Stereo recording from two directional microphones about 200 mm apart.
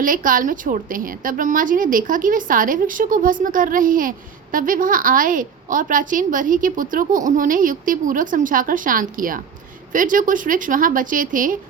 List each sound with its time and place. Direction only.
0.0 s a woman's voice: 45° right (ahead or behind)